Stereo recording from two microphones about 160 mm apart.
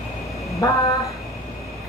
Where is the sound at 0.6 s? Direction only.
20° left (ahead or behind).